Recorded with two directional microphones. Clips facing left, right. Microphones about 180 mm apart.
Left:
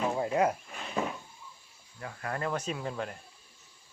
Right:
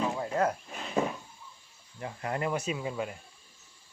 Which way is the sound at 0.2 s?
15° left (ahead or behind).